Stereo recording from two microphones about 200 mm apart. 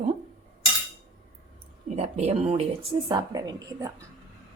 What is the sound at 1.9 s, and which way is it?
Speech, 30° right (ahead or behind).